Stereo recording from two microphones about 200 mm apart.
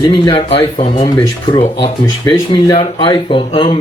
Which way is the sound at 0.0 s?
25° left (ahead or behind).